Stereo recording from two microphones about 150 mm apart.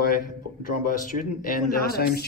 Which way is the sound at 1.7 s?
90° left.